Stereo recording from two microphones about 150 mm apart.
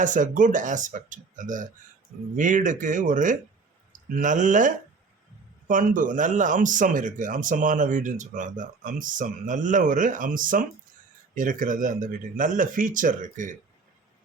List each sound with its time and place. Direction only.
0.0 s a man's voice: 60° right (ahead or behind)